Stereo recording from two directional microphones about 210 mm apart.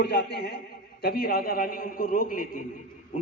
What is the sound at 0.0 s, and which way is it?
A man's voice, 55° left (ahead or behind).